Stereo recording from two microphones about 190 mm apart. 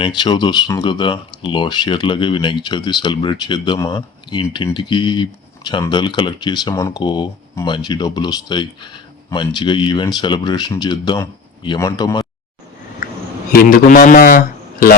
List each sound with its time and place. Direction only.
0.0 s speech: 25° left (ahead or behind)
13.5 s a man's voice: 50° left (ahead or behind)